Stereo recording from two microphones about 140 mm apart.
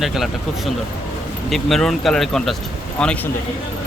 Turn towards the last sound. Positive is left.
turn(degrees=5)  # may be behind; listen again after turning